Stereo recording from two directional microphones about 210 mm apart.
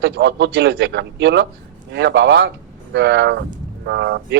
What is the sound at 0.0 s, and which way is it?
Speech, 55° right (ahead or behind).